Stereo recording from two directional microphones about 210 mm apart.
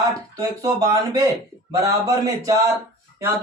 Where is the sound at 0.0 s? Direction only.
15° right (ahead or behind).